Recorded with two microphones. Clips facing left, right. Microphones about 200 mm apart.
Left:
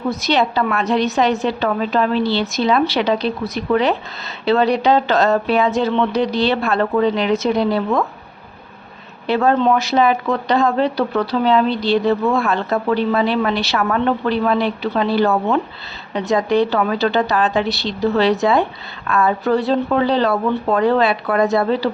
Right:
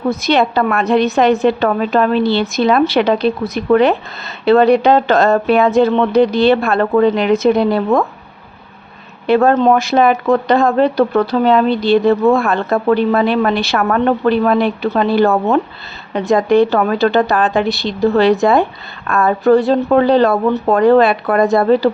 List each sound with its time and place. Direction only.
0.1 s a woman's voice: 55° right (ahead or behind)
9.2 s speech: 55° right (ahead or behind)